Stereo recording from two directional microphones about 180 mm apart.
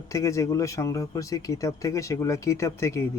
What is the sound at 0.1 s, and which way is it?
Speech, 15° left (ahead or behind).